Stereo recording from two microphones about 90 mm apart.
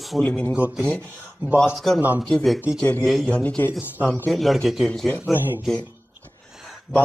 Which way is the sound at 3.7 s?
20° right (ahead or behind).